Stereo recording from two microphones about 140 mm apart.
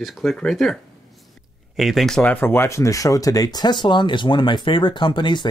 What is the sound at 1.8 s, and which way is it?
Speech, centre (ahead or behind).